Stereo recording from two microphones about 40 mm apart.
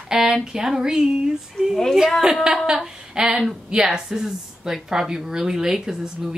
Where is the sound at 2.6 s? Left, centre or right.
Centre.